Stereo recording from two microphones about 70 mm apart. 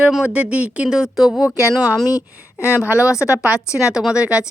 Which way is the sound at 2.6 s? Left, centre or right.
Right.